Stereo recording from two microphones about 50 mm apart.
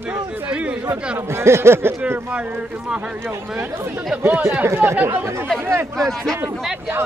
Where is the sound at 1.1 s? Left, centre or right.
Right.